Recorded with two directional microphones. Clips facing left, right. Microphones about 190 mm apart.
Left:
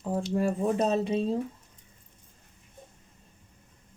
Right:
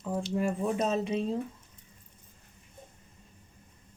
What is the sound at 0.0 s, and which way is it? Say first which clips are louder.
Speech: left 3 dB; 35° left (ahead or behind).